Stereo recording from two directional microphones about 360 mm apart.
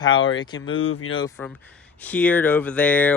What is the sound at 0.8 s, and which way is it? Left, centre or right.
Speech, left.